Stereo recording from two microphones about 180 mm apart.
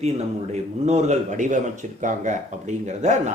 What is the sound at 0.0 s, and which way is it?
A man's voice, 40° right (ahead or behind).